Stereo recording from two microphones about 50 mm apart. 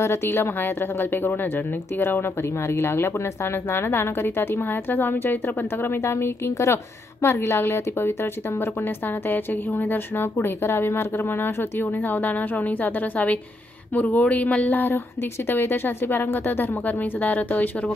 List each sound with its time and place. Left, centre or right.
0.0 s a woman's voice: left
2.0 s a woman's voice: left
2.7 s a woman's voice: left
4.9 s a woman's voice: left
6.0 s a woman's voice: left
9.3 s speech: left
10.4 s speech: left
15.5 s a woman's voice: left